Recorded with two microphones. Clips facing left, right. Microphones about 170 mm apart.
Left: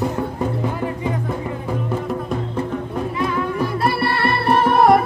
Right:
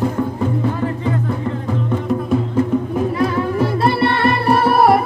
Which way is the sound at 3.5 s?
25° right (ahead or behind).